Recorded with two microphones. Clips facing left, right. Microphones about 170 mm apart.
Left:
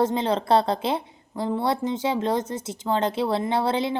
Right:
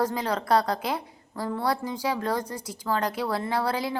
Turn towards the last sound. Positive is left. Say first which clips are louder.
# left 4 dB
turn(degrees=25)  # may be behind; listen again after turning